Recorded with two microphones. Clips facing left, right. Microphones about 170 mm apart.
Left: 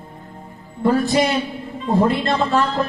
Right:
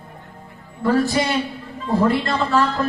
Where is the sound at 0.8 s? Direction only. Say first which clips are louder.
Left 2 dB; 25° left (ahead or behind).